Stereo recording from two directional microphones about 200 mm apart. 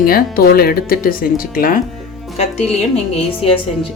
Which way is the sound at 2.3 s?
35° left (ahead or behind).